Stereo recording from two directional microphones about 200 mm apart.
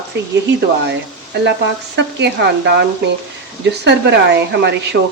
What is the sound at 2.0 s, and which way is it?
Speech, 65° right (ahead or behind).